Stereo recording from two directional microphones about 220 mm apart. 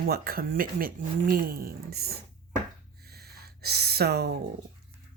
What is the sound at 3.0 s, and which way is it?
Gasp, 45° right (ahead or behind).